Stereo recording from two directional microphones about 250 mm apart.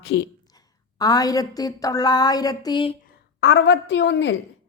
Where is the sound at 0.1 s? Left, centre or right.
Left.